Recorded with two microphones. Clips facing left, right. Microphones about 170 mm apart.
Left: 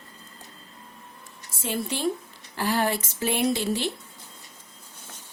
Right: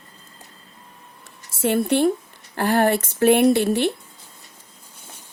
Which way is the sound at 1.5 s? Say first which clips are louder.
Right 10 dB; 65° right (ahead or behind).